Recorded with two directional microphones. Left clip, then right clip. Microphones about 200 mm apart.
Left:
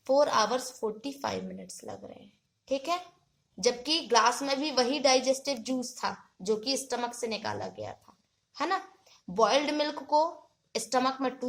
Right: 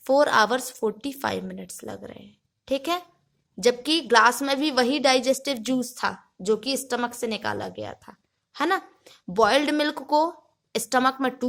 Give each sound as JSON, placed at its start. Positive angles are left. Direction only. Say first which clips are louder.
{"t": 0.0, "sound": "a woman's voice", "louder": "right 6 dB", "side_deg": -45}